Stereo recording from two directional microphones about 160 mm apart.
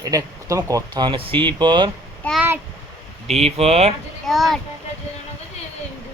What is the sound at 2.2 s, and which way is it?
Speech, 10° left (ahead or behind).